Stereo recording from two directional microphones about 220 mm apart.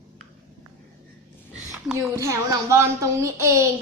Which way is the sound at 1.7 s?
15° right (ahead or behind).